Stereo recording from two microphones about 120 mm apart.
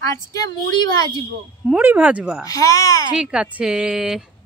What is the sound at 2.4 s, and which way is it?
Speech, 30° left (ahead or behind).